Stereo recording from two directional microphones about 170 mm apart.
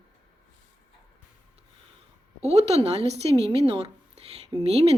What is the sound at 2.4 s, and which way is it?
Speech, 40° right (ahead or behind).